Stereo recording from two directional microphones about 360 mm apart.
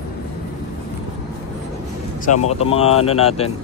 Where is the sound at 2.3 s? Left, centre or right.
Centre.